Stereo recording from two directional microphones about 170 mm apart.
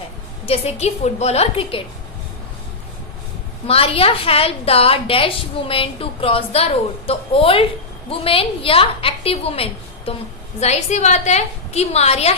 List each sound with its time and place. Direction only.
0.4 s a woman's voice: 35° left (ahead or behind)
3.7 s a woman's voice: 35° left (ahead or behind)